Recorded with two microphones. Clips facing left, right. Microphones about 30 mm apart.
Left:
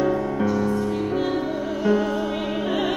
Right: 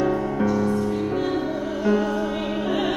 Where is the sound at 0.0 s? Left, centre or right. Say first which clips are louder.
Even; centre.